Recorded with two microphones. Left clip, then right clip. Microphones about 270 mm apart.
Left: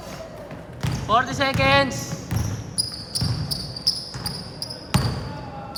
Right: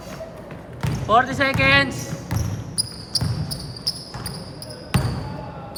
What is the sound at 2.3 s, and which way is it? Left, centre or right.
Basketball bounce, centre.